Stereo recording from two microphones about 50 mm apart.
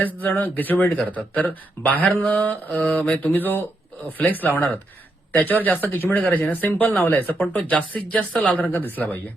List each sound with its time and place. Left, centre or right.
0.0 s speech: left
7.5 s speech: left